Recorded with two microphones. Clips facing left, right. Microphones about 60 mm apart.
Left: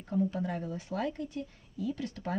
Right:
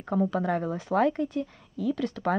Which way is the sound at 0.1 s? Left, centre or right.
Right.